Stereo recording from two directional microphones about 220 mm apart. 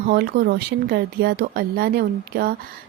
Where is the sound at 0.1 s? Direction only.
45° right (ahead or behind).